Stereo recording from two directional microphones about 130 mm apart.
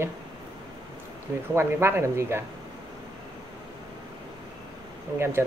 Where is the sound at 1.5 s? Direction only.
20° right (ahead or behind).